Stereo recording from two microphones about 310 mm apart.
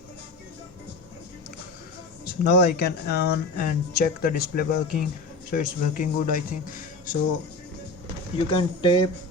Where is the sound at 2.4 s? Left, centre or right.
Left.